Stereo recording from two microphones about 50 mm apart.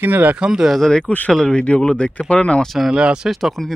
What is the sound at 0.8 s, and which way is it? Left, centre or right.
Speech, centre.